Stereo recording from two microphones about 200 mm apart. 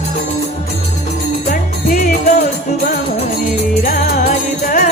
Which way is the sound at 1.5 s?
40° left (ahead or behind).